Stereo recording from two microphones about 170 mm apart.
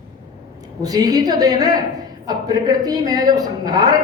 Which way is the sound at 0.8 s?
20° right (ahead or behind).